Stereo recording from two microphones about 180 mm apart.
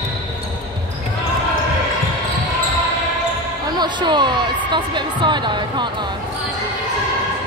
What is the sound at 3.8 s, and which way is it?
Speech, 25° right (ahead or behind).